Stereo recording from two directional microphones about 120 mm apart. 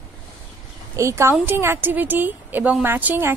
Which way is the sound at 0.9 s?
25° right (ahead or behind).